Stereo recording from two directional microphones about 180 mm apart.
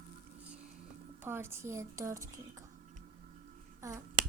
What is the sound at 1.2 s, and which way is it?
A woman's voice, 15° right (ahead or behind).